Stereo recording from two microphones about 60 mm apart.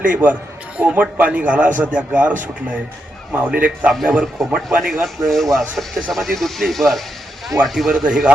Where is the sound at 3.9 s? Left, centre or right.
Centre.